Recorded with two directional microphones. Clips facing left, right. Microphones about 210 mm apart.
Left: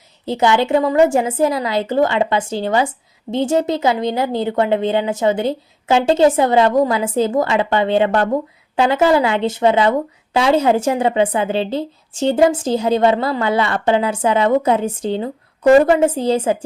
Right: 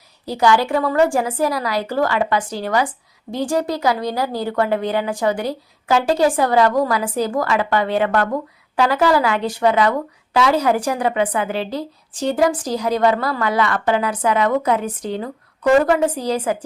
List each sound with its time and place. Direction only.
0.3 s a woman's voice: 25° left (ahead or behind)